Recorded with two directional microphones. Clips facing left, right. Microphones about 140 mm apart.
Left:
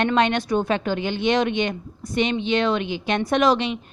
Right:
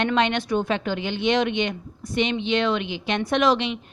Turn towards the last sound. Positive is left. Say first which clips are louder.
# left 1 dB
turn(degrees=40)  # may be behind; listen again after turning